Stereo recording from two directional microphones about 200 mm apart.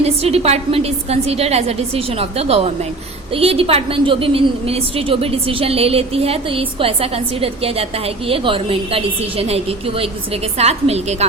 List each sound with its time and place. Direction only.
0.0 s a woman's voice: 30° right (ahead or behind)